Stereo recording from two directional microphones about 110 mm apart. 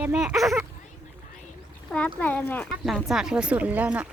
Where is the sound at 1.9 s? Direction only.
15° left (ahead or behind).